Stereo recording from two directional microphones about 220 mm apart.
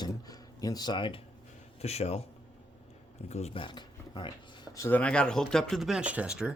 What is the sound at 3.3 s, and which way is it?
Speech, 25° left (ahead or behind).